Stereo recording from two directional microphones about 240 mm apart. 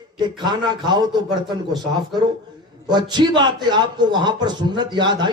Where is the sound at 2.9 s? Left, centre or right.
Centre.